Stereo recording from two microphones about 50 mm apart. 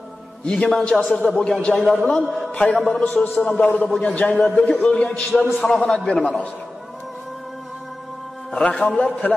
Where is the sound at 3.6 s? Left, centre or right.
Left.